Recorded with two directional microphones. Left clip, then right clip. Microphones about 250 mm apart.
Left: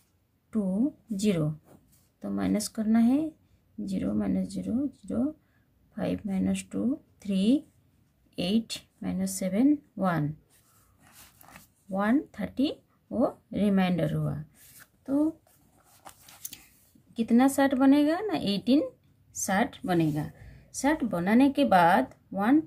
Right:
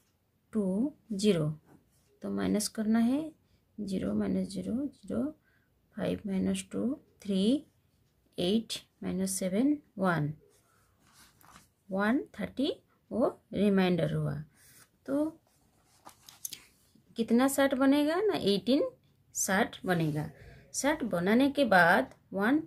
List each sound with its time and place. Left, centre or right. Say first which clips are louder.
0.5 s a sound: left 3 dB; centre
2.1 s speech: left 2 dB; centre
11.9 s speech: left 3 dB; centre
17.1 s speech: left 3 dB; centre